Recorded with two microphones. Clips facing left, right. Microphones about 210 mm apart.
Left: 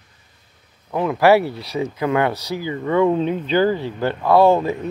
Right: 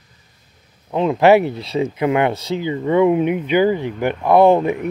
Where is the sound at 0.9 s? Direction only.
20° right (ahead or behind).